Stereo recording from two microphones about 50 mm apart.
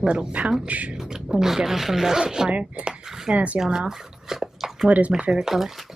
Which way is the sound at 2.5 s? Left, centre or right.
Right.